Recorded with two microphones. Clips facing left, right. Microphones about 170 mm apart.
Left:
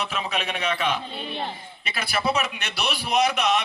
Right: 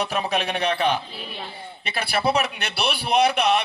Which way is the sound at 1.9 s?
30° right (ahead or behind).